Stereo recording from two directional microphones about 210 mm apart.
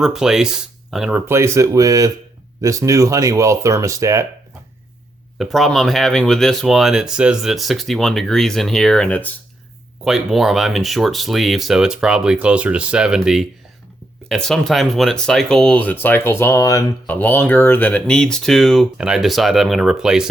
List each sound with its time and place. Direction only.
0.0 s speech: centre (ahead or behind)
1.3 s speech: 15° right (ahead or behind)
5.4 s speech: centre (ahead or behind)